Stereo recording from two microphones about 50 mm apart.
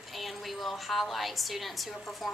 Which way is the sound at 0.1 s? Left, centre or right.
Centre.